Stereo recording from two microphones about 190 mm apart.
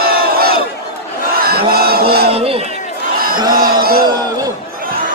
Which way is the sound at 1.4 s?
55° right (ahead or behind).